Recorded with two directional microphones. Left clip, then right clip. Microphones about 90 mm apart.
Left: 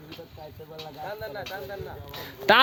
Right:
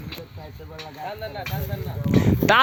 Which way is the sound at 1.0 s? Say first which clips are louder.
Right 3 dB; 25° left (ahead or behind).